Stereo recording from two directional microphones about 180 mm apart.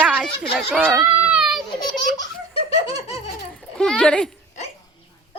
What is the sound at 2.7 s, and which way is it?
Laughter, 35° left (ahead or behind).